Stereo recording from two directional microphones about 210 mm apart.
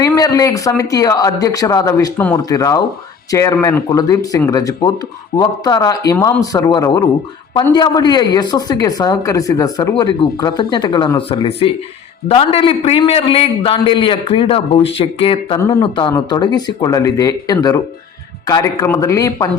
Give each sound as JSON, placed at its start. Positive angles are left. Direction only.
{"t": 0.0, "sound": "a woman's voice", "side_deg": 15}